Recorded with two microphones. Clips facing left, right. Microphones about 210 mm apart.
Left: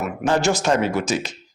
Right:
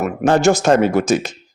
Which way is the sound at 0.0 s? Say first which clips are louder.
Right 6 dB; 50° right (ahead or behind).